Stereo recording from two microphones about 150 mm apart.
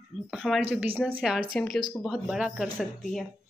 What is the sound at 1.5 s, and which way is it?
A woman's voice, 5° left (ahead or behind).